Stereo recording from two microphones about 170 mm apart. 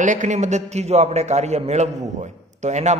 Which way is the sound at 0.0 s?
45° right (ahead or behind).